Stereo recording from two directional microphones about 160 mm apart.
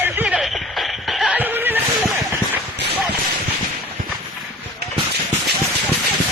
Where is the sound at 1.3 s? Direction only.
10° right (ahead or behind).